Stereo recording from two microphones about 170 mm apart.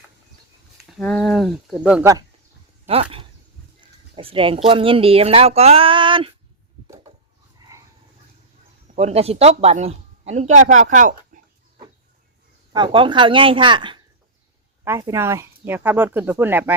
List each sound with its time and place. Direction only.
0.9 s speech: 5° left (ahead or behind)
2.8 s speech: 35° right (ahead or behind)
9.0 s speech: 35° right (ahead or behind)
11.3 s chicken: 50° right (ahead or behind)
12.7 s speech: 30° right (ahead or behind)
14.8 s speech: 15° right (ahead or behind)